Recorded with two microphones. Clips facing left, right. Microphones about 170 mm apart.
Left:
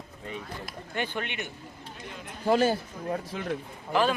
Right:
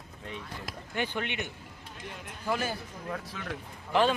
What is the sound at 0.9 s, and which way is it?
Speech, 15° right (ahead or behind).